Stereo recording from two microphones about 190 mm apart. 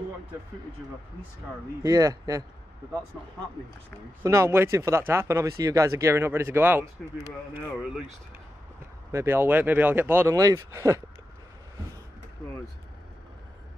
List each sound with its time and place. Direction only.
1.8 s speech: 15° right (ahead or behind)
4.2 s speech: 15° right (ahead or behind)
9.1 s speech: 15° right (ahead or behind)